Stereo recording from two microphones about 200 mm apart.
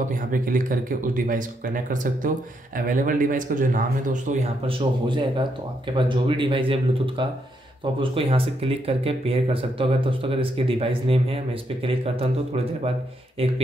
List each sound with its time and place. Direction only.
0.3 s a man's voice: 40° right (ahead or behind)